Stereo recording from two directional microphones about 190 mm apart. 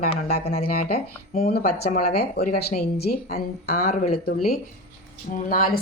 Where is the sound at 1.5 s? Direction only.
55° left (ahead or behind).